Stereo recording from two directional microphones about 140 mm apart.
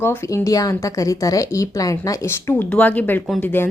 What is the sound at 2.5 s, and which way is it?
Speech, 10° left (ahead or behind).